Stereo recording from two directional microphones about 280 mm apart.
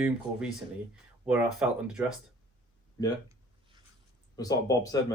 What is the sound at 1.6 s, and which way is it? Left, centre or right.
Speech, centre.